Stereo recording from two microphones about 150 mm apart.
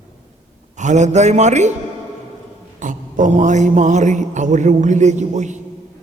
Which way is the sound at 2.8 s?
60° right (ahead or behind).